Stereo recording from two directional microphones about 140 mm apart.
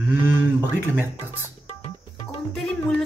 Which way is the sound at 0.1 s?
15° right (ahead or behind).